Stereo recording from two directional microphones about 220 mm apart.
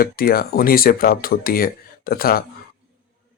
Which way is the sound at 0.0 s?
40° left (ahead or behind).